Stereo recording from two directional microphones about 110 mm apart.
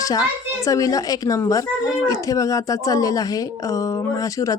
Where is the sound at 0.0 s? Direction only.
30° left (ahead or behind).